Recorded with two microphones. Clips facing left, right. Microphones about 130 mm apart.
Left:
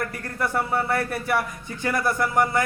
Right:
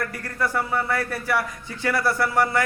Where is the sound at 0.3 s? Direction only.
25° left (ahead or behind).